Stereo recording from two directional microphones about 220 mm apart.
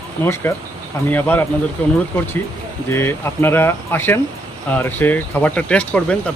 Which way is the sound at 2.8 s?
10° left (ahead or behind).